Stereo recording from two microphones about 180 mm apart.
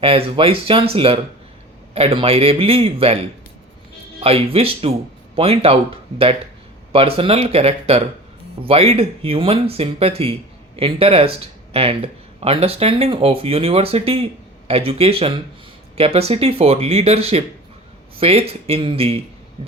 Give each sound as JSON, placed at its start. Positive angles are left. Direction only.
{"t": 0.0, "sound": "speech", "side_deg": -30}
{"t": 6.9, "sound": "speech", "side_deg": -30}